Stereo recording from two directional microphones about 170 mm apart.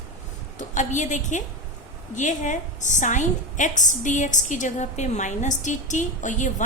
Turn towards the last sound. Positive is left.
turn(degrees=45)  # may be behind; listen again after turning